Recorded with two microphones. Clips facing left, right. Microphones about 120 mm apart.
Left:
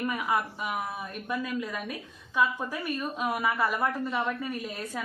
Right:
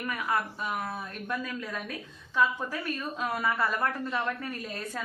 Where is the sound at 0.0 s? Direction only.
20° left (ahead or behind).